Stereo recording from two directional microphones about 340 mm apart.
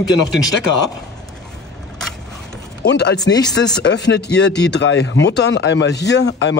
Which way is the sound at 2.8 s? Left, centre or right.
Left.